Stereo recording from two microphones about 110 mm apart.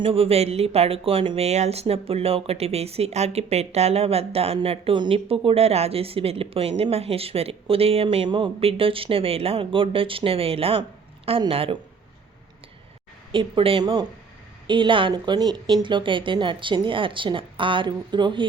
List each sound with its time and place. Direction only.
0.0 s speech: 60° right (ahead or behind)
1.5 s speech: 80° right; by 11.8 s 55° right (ahead or behind)
13.3 s speech: 50° right (ahead or behind)